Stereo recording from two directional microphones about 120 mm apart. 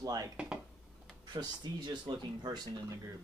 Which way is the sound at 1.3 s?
35° right (ahead or behind).